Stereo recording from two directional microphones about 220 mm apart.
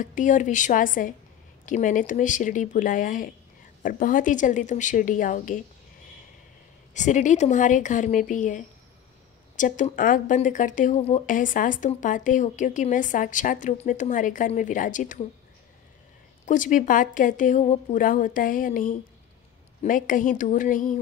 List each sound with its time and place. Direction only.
0.0 s speech: 35° left (ahead or behind)
6.9 s speech: 35° left (ahead or behind)
16.4 s speech: 35° left (ahead or behind)